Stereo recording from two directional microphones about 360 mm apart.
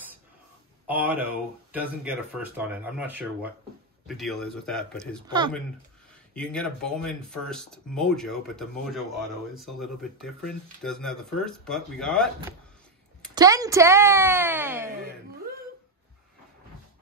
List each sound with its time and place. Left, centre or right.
0.8 s speech: centre
5.4 s speech: centre
6.3 s speech: centre
13.3 s speech: centre